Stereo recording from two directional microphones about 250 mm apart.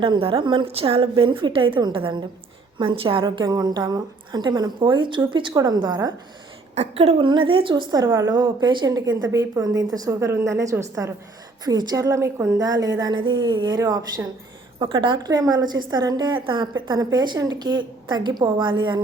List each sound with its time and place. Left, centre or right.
0.0 s a woman's voice: right